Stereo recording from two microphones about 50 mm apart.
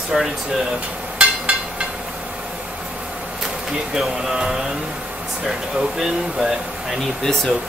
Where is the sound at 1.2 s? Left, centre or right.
Right.